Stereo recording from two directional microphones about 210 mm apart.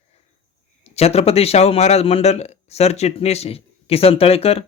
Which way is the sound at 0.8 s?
30° left (ahead or behind).